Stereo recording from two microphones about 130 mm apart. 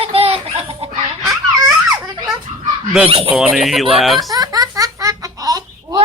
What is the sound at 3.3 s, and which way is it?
Speech, 10° right (ahead or behind).